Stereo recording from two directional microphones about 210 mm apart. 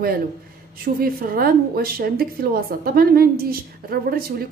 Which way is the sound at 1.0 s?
45° right (ahead or behind).